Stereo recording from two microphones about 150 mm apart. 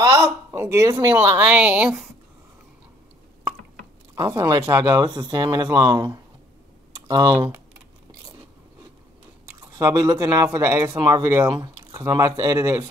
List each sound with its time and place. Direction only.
0.0 s speech: 15° right (ahead or behind)
4.1 s speech: 20° right (ahead or behind)
9.7 s speech: 25° right (ahead or behind)